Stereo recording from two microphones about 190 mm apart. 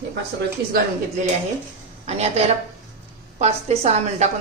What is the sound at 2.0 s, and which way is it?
A woman's voice, 35° right (ahead or behind).